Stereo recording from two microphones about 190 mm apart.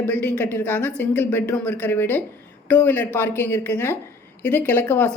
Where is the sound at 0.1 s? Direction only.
10° left (ahead or behind).